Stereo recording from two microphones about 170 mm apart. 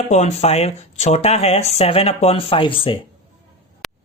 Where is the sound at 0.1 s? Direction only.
40° left (ahead or behind).